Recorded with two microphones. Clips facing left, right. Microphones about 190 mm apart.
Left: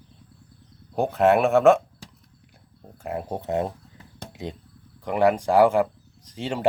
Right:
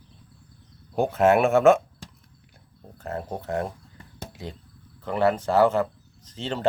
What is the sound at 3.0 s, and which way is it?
Speech, 10° left (ahead or behind).